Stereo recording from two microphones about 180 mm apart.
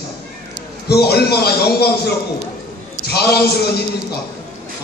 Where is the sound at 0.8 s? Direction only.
65° left (ahead or behind).